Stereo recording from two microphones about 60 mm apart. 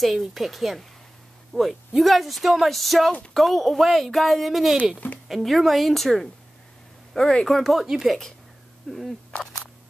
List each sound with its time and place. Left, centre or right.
0.0 s speech: centre
4.9 s speech: left
5.3 s speech: centre
8.9 s a sound: centre